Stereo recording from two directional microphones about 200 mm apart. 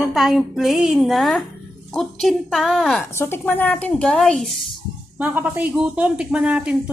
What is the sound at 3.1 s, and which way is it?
A woman's voice, 10° left (ahead or behind).